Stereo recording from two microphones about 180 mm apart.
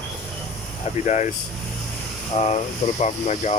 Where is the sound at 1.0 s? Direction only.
40° left (ahead or behind).